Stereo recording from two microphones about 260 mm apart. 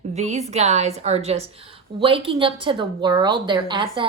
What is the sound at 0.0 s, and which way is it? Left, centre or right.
A woman's voice, right.